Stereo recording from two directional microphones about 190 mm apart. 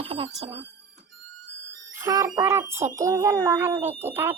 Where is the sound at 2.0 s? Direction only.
15° right (ahead or behind).